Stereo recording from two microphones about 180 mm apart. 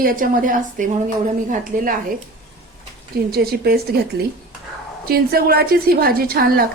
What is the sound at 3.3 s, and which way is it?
Speech, 60° right (ahead or behind).